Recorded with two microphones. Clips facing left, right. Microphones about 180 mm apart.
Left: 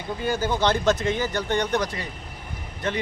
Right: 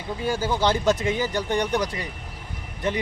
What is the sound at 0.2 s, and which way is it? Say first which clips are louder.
Speech: even; 10° right (ahead or behind).